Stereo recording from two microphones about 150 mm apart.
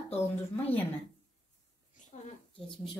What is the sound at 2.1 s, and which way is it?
Speech, 55° left (ahead or behind).